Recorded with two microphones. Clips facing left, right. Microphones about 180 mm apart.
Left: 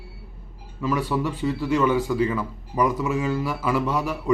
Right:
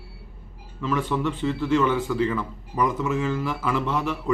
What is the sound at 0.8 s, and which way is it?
Speech, 10° left (ahead or behind).